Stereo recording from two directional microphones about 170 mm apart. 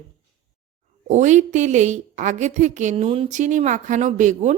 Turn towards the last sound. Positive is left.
turn(degrees=-45)  # may be behind; listen again after turning